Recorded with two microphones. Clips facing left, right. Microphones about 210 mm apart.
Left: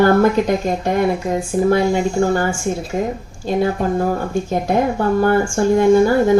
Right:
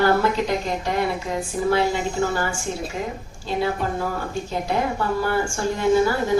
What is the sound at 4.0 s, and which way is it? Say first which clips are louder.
Speech: left 7 dB; 50° left (ahead or behind).